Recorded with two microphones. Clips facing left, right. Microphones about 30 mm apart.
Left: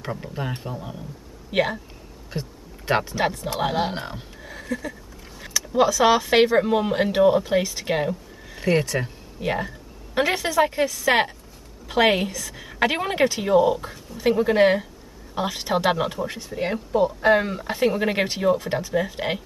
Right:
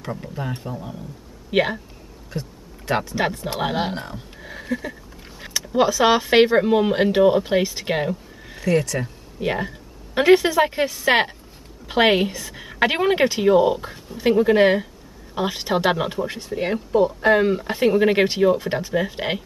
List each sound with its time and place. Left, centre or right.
0.1 s speech: centre
1.5 s a woman's voice: centre
2.3 s a sound: centre
3.5 s a woman's voice: centre
3.9 s speech: centre
4.4 s a sound: centre
5.7 s a woman's voice: centre
8.5 s speech: centre
9.4 s a woman's voice: centre